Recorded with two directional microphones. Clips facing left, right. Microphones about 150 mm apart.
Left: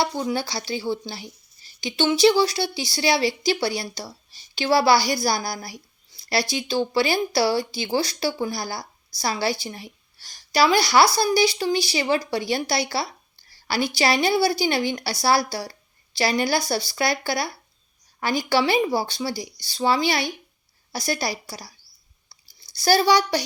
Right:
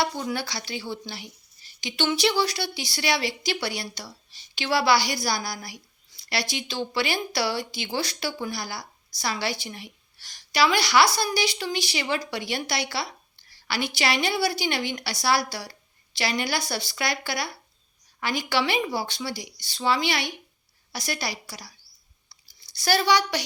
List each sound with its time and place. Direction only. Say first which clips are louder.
0.0 s speech: left 3 dB; 30° left (ahead or behind)
6.1 s a sound: left 4 dB; 30° left (ahead or behind)
6.5 s speech: left 7 dB; 30° left (ahead or behind)
22.3 s chewing: left 2 dB; 35° left (ahead or behind)